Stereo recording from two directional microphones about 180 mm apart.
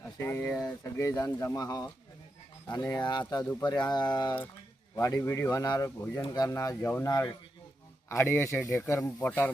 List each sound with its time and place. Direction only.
0.2 s speech: 15° left (ahead or behind)